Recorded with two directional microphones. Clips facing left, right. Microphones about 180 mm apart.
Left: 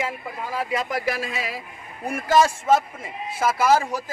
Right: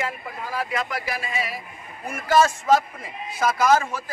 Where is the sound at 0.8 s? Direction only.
45° left (ahead or behind).